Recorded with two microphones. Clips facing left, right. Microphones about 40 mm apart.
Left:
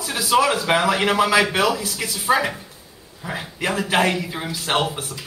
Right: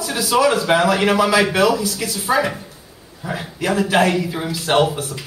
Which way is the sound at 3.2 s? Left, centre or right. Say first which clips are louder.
Right 3 dB; centre.